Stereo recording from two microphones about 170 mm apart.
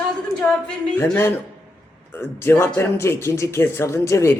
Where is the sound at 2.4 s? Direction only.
10° left (ahead or behind).